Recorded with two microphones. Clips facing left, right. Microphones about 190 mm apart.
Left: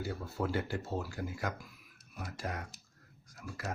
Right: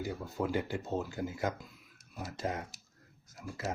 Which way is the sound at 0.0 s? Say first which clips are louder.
Right 1 dB; 15° right (ahead or behind).